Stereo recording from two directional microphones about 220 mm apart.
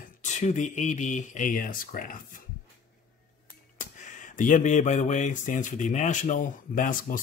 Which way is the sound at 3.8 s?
35° left (ahead or behind).